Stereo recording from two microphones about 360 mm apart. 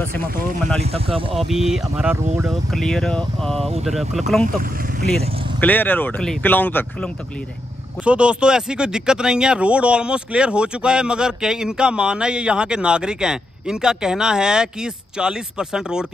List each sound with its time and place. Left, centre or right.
0.7 s speech: centre
1.3 s speech: centre
5.6 s speech: centre